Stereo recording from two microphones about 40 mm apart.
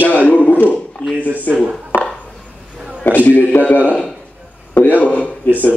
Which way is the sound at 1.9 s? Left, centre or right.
Left.